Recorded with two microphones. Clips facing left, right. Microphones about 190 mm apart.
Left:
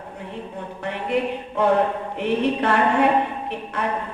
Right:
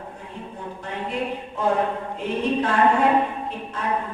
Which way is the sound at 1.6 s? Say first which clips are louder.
Left 4 dB; 70° left (ahead or behind).